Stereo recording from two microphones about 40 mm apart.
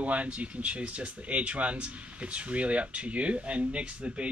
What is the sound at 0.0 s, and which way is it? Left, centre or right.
Speech, right.